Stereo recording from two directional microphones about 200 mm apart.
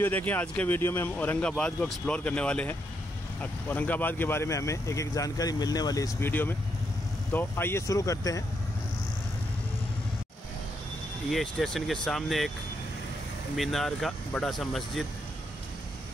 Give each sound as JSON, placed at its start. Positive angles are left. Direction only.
{"t": 0.0, "sound": "speech", "side_deg": 10}
{"t": 11.2, "sound": "speech", "side_deg": 0}
{"t": 13.6, "sound": "speech", "side_deg": 0}